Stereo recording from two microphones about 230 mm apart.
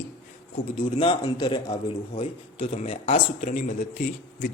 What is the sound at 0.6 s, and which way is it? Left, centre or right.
Speech, left.